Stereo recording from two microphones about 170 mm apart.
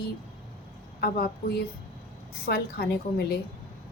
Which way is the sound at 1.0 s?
65° left (ahead or behind).